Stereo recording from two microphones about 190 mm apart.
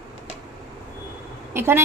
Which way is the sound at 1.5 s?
15° right (ahead or behind).